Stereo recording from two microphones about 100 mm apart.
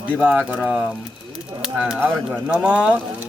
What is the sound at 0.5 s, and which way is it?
Speech, 10° right (ahead or behind).